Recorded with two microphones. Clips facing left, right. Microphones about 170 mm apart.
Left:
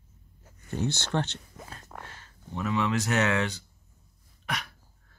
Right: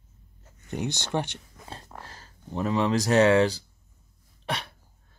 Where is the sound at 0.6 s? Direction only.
15° right (ahead or behind).